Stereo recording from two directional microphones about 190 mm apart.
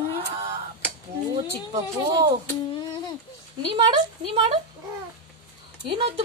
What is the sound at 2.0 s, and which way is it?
Speech, 25° right (ahead or behind).